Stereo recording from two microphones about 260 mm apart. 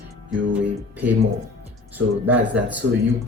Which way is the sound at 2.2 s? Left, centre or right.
Right.